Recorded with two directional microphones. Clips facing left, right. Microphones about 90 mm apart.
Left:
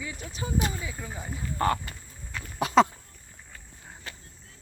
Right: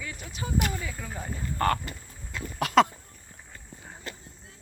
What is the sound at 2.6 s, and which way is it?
Speech, 20° left (ahead or behind).